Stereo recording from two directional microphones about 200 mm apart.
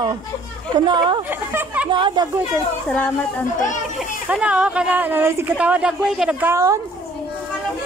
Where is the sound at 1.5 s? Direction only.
10° right (ahead or behind).